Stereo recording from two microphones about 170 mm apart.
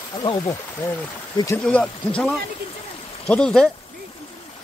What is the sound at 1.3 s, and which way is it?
Speech, 20° left (ahead or behind).